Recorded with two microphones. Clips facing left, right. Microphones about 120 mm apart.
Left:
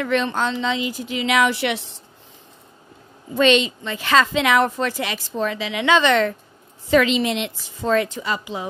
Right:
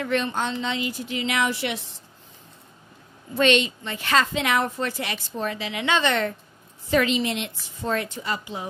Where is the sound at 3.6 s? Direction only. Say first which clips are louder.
Left 4 dB; 90° left.